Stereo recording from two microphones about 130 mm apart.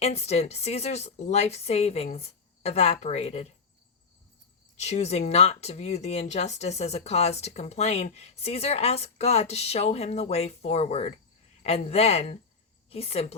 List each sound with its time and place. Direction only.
0.0 s speech: 55° left (ahead or behind)
4.8 s speech: 55° left (ahead or behind)